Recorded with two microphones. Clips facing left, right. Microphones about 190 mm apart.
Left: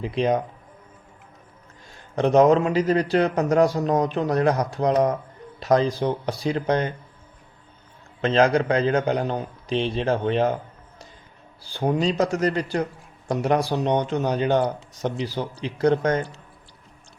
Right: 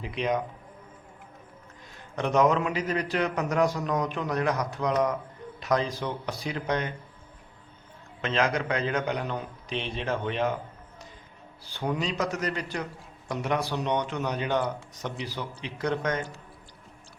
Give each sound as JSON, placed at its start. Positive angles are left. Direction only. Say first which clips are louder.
{"t": 0.0, "sound": "speech", "louder": "left 6 dB", "side_deg": 35}
{"t": 1.9, "sound": "speech", "louder": "left 8 dB", "side_deg": 30}
{"t": 8.2, "sound": "speech", "louder": "left 8 dB", "side_deg": 35}
{"t": 11.7, "sound": "speech", "louder": "left 7 dB", "side_deg": 35}